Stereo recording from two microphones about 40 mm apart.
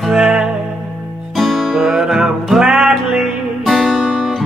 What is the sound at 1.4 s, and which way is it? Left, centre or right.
Music, centre.